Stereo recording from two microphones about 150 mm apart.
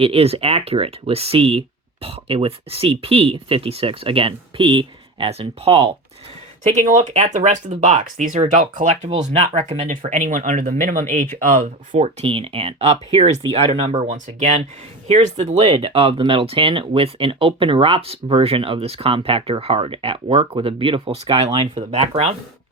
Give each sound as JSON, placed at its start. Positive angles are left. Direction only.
{"t": 0.0, "sound": "speech", "side_deg": -40}
{"t": 6.7, "sound": "speech", "side_deg": -55}
{"t": 11.9, "sound": "speech", "side_deg": -40}